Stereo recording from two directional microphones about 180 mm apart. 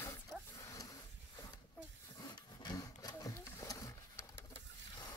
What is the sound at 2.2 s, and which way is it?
Wood, 25° left (ahead or behind).